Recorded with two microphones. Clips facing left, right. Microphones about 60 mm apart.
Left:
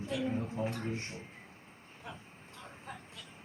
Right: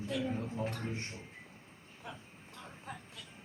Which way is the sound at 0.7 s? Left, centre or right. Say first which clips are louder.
Left 2 dB; centre.